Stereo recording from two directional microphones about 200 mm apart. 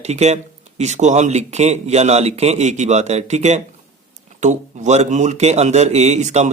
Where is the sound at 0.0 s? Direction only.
35° right (ahead or behind).